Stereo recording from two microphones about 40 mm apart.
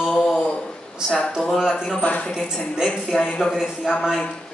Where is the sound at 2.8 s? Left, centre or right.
Centre.